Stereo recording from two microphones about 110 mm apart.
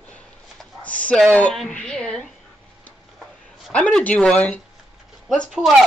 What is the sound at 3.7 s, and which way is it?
A woman's voice, 10° left (ahead or behind).